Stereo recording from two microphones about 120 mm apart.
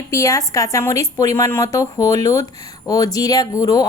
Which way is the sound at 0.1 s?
25° left (ahead or behind).